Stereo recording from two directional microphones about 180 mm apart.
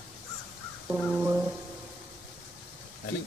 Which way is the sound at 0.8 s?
5° right (ahead or behind).